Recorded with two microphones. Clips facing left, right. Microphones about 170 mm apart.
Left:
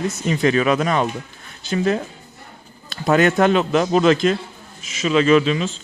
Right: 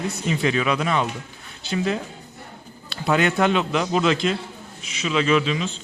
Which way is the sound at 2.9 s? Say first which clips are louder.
Left 5 dB; 45° left (ahead or behind).